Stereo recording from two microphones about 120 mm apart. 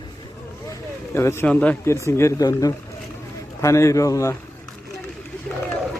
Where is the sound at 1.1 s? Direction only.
20° left (ahead or behind).